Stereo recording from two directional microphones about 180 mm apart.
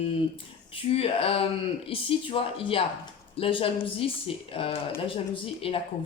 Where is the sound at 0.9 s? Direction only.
30° left (ahead or behind).